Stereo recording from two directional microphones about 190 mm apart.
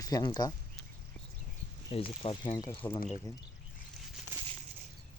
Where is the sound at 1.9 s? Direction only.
30° left (ahead or behind).